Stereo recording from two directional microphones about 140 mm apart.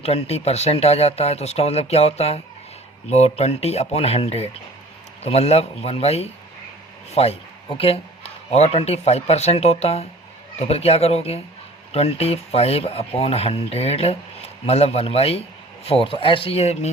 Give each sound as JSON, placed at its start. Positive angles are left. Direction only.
{"t": 0.0, "sound": "speech", "side_deg": 50}